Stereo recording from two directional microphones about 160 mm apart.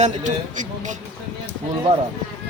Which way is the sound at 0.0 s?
50° right (ahead or behind).